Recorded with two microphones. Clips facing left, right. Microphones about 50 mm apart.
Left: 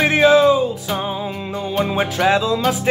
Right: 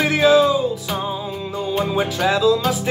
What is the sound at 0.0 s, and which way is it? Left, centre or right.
Music, centre.